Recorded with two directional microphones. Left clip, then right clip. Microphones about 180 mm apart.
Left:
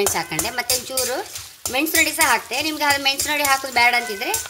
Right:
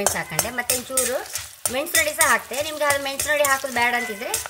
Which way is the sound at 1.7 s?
15° left (ahead or behind).